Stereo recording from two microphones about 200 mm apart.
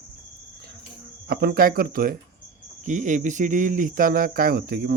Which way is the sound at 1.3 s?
50° right (ahead or behind).